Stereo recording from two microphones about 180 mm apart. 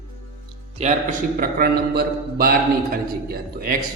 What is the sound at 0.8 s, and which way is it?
A man's voice, 40° right (ahead or behind).